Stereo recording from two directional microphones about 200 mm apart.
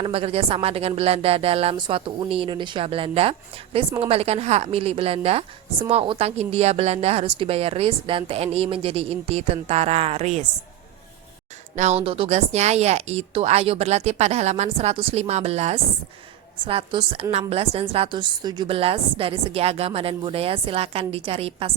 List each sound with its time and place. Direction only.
0.0 s a woman's voice: 30° right (ahead or behind)
11.8 s a woman's voice: 30° right (ahead or behind)